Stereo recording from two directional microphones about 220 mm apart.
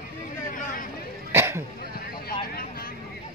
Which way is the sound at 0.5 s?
40° left (ahead or behind).